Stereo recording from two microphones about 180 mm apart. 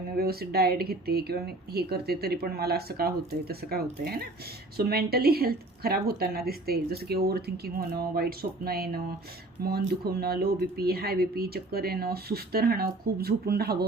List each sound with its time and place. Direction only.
0.2 s speech: 60° right (ahead or behind)